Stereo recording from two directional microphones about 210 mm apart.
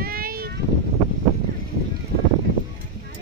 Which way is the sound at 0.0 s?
45° right (ahead or behind).